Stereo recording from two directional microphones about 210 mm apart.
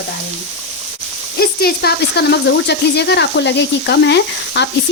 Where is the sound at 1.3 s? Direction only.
50° left (ahead or behind).